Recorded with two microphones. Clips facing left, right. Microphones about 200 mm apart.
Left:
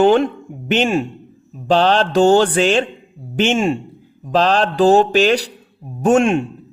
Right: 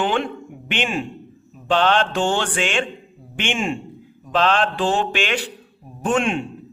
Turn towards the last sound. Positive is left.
turn(degrees=45)  # may be behind; listen again after turning